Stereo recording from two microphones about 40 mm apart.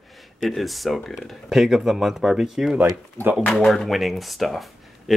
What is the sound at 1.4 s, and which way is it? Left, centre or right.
Speech, centre.